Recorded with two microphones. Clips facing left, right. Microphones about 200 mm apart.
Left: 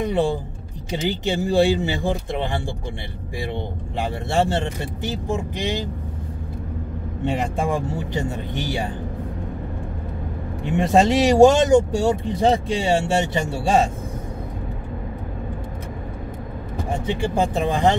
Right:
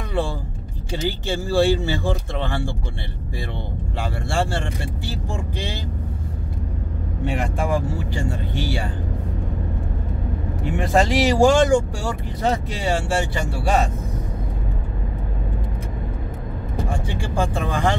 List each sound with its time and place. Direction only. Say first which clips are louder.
0.0 s a sound: left 5 dB; 20° left (ahead or behind)
0.9 s speech: left 2 dB; 20° left (ahead or behind)
4.0 s speech: left 3 dB; 20° left (ahead or behind)
7.5 s speech: even; 25° left (ahead or behind)
10.6 s speech: left 3 dB; 20° left (ahead or behind)
16.9 s speech: left 6 dB; 20° left (ahead or behind)